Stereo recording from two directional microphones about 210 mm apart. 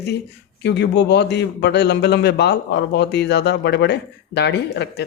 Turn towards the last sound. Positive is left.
turn(degrees=50)  # may be behind; listen again after turning